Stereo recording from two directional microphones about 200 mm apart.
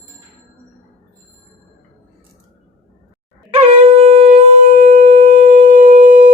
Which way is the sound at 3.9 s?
30° right (ahead or behind).